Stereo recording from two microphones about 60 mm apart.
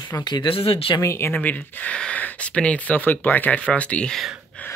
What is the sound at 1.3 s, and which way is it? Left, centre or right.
Speech, left.